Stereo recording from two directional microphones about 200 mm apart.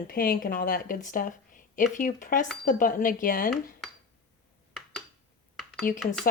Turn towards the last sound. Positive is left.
turn(degrees=45)  # may be behind; listen again after turning